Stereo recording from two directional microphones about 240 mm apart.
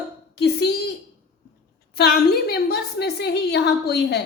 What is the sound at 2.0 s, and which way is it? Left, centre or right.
A woman's voice, left.